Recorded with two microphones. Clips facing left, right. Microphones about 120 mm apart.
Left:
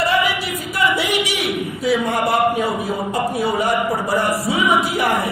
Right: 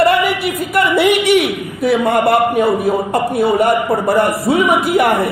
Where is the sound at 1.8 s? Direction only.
60° right (ahead or behind).